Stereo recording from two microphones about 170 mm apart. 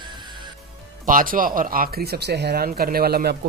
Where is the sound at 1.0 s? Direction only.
55° right (ahead or behind).